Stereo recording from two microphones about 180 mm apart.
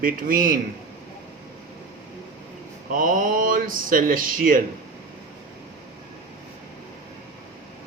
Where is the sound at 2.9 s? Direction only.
50° right (ahead or behind).